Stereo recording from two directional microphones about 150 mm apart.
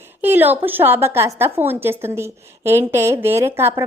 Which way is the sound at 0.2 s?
10° right (ahead or behind).